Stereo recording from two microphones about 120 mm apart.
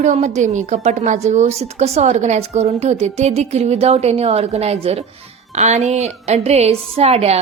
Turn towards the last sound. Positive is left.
turn(degrees=-60)  # may be behind; listen again after turning